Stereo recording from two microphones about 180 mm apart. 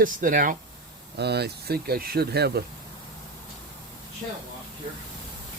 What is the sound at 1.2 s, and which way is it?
Speech, 65° right (ahead or behind).